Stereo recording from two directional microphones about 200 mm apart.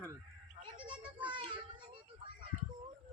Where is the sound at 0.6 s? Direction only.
25° right (ahead or behind).